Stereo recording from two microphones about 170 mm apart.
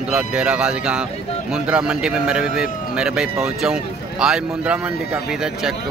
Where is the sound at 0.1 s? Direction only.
5° right (ahead or behind).